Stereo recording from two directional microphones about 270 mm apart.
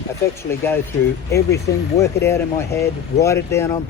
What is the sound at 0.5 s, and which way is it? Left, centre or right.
Speech, centre.